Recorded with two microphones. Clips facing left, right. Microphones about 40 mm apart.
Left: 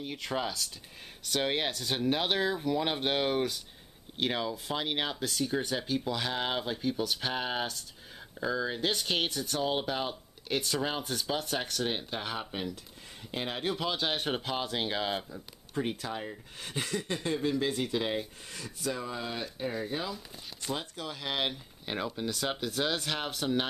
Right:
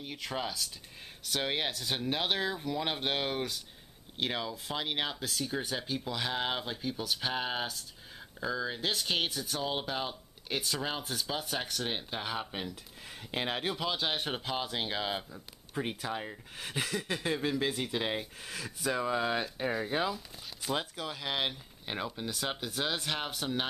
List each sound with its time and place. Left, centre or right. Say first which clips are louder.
0.0 s speech: left 3 dB; centre
13.3 s speech: even; centre
20.6 s speech: right 2 dB; centre